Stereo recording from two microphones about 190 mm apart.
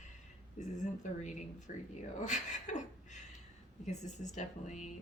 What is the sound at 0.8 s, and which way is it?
A woman's voice, 40° left (ahead or behind).